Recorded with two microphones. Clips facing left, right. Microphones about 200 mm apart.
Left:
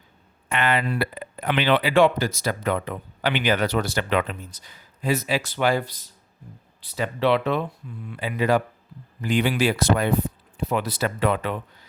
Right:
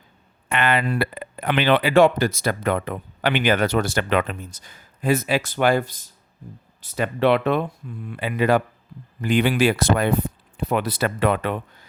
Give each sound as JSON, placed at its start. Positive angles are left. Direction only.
{"t": 0.4, "sound": "speech", "side_deg": -60}